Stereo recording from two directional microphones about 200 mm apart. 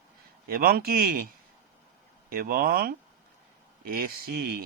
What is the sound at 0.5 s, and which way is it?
Speech, 45° right (ahead or behind).